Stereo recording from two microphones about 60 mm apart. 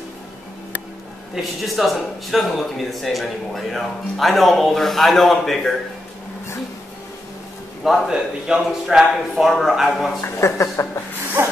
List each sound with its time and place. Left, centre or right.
1.3 s speech: centre
7.8 s speech: centre
10.2 s speech: left
11.4 s a sound: right